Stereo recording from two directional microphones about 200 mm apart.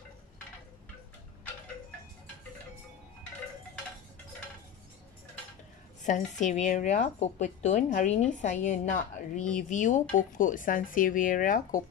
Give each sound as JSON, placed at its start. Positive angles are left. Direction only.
{"t": 6.0, "sound": "a woman's voice", "side_deg": 40}
{"t": 9.4, "sound": "speech", "side_deg": 5}
{"t": 9.7, "sound": "a woman's voice", "side_deg": 35}